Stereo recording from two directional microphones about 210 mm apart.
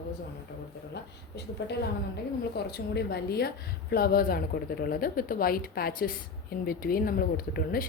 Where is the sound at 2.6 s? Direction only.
50° left (ahead or behind).